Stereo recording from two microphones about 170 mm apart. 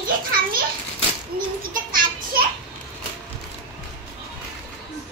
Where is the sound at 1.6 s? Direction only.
55° right (ahead or behind).